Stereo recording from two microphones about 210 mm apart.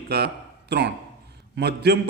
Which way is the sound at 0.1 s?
50° right (ahead or behind).